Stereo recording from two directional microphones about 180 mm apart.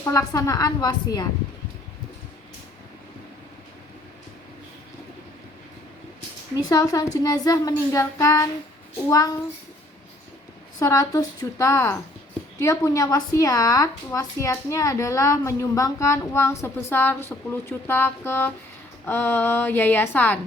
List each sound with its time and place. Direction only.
0.0 s a child's voice: 20° left (ahead or behind)
6.6 s a child's voice: 20° left (ahead or behind)
10.8 s a woman's voice: 20° left (ahead or behind)